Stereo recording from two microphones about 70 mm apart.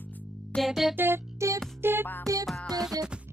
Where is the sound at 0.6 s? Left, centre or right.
Centre.